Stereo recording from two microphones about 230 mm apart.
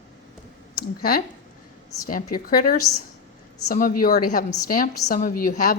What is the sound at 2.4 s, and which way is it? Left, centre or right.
Speech, left.